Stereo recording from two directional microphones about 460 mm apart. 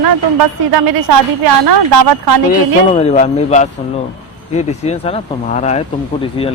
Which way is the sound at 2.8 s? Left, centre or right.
Centre.